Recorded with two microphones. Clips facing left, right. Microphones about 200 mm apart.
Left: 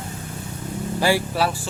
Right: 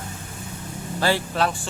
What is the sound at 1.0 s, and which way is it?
Speech, 10° left (ahead or behind).